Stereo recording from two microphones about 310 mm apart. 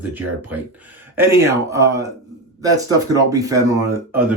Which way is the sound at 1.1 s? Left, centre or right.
Centre.